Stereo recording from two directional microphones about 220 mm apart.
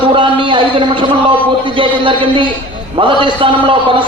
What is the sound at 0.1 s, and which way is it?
A man's voice, 20° right (ahead or behind).